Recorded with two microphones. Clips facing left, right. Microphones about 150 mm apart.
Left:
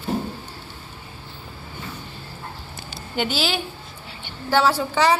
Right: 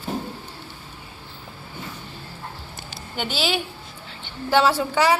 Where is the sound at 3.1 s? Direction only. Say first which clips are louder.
Left 1 dB; centre (ahead or behind).